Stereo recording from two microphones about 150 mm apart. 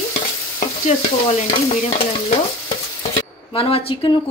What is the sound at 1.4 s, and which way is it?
Speech, 45° left (ahead or behind).